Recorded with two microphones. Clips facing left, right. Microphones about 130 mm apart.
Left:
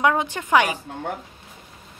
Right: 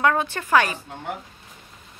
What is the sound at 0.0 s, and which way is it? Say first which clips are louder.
Speech: left 1 dB; 15° left (ahead or behind).